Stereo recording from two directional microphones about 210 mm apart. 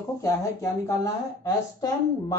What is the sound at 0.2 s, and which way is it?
A woman's voice, 15° left (ahead or behind).